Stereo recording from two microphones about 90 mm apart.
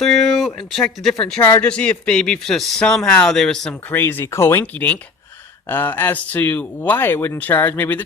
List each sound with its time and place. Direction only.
0.0 s speech: centre (ahead or behind)
1.4 s speech: 25° left (ahead or behind)
1.6 s speech: 10° left (ahead or behind)
3.8 s speech: 25° left (ahead or behind)